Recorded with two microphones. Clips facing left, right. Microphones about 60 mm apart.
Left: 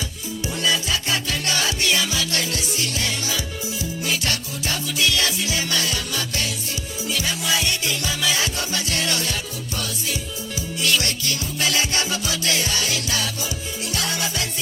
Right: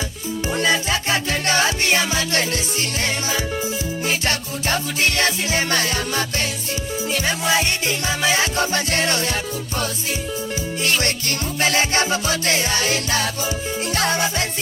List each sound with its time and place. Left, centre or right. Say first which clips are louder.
0.5 s music: right 3 dB; right
10.8 s music: right 1 dB; right